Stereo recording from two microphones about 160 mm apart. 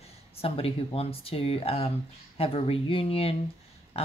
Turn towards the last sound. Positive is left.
turn(degrees=35)  # may be behind; listen again after turning